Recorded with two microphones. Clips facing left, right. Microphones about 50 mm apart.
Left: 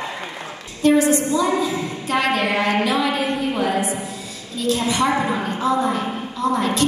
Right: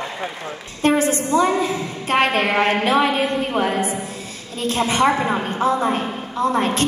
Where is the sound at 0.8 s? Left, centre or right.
Right.